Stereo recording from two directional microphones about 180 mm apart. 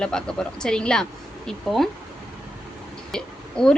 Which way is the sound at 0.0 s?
5° left (ahead or behind).